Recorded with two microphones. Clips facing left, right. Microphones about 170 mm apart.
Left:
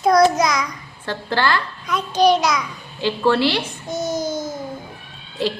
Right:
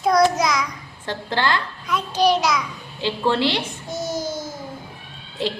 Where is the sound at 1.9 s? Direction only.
Centre (ahead or behind).